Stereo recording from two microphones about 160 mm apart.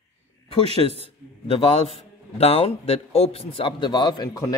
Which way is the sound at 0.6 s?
40° right (ahead or behind).